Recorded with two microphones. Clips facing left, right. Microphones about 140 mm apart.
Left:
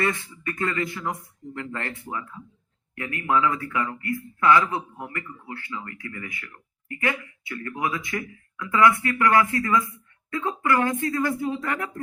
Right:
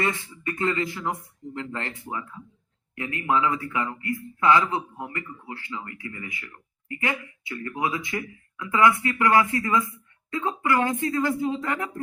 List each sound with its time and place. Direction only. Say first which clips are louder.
0.0 s a man's voice: left 1 dB; 20° right (ahead or behind)